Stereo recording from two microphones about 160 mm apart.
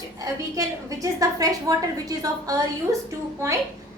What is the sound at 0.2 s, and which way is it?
A woman's voice, 20° right (ahead or behind).